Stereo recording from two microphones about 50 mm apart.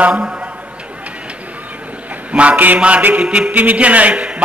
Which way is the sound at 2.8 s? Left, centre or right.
Right.